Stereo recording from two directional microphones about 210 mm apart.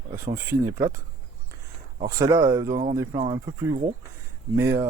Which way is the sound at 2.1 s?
15° right (ahead or behind).